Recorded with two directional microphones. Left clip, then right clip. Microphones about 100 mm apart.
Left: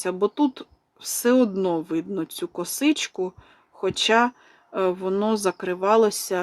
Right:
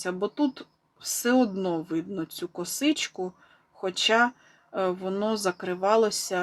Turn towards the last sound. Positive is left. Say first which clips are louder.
# left 4 dB
turn(degrees=50)  # may be behind; listen again after turning